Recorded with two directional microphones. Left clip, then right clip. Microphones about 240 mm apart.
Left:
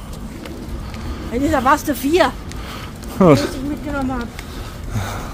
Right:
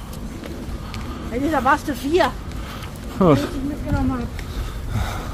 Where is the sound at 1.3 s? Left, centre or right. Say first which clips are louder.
Left 3 dB; left.